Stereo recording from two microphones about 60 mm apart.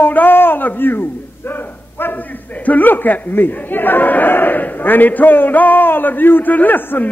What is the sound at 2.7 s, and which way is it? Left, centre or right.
A man's voice, left.